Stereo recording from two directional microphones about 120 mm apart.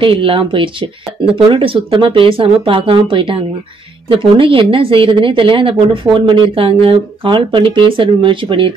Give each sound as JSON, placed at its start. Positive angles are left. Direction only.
{"t": 0.0, "sound": "speech", "side_deg": -45}